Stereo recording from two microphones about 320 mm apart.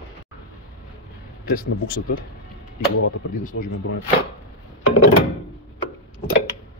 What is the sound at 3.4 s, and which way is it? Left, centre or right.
Speech, left.